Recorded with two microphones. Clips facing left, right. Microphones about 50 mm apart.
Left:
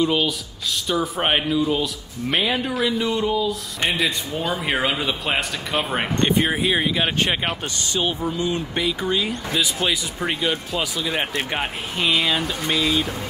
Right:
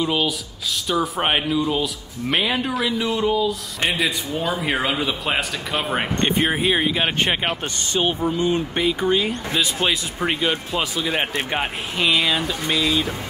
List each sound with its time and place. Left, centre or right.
0.0 s speech: centre
6.2 s speech: right
6.7 s speech: centre
9.0 s speech: centre
11.5 s speech: centre
12.2 s a sound: centre